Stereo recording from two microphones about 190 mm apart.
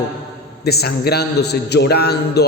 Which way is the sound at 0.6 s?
55° left (ahead or behind).